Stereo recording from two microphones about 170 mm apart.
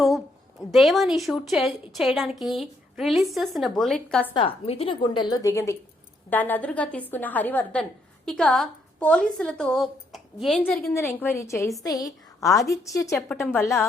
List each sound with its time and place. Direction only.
0.7 s a woman's voice: centre (ahead or behind)
4.4 s a woman's voice: 35° left (ahead or behind); by 10.9 s centre (ahead or behind)
10.9 s a woman's voice: 15° left (ahead or behind)